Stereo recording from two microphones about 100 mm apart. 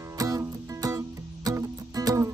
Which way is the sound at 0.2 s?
40° right (ahead or behind).